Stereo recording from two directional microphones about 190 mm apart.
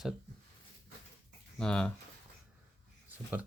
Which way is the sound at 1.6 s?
5° left (ahead or behind).